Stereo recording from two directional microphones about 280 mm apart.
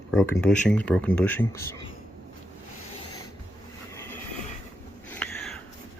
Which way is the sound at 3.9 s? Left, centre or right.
Centre.